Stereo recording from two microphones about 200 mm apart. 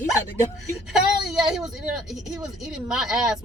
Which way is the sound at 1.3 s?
Centre (ahead or behind).